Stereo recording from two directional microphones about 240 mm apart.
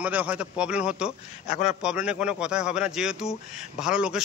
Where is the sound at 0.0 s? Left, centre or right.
Centre.